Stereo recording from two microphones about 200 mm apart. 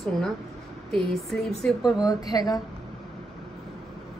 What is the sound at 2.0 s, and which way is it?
Speech, 20° left (ahead or behind).